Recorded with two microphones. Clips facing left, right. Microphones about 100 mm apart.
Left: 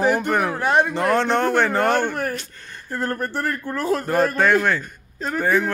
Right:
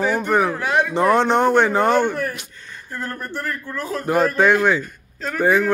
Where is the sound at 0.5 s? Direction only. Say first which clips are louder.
Left 1 dB; 35° left (ahead or behind).